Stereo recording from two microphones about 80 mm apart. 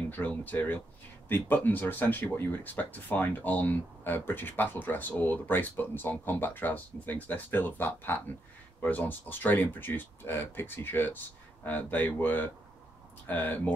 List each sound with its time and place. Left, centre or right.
0.1 s speech: left